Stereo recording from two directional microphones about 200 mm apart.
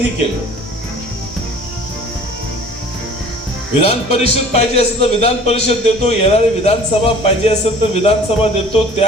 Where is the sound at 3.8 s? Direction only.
35° left (ahead or behind).